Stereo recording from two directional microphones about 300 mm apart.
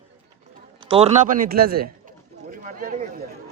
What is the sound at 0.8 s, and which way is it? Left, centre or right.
Speech, centre.